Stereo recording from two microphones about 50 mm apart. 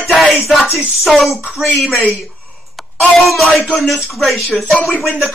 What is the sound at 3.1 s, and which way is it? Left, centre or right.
Speech, centre.